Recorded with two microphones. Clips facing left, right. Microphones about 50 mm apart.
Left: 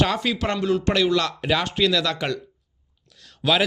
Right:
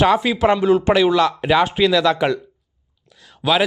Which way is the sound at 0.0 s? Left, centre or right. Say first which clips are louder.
Right 7 dB; centre.